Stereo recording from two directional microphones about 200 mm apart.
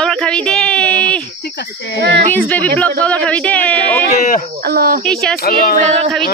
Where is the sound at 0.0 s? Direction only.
5° left (ahead or behind).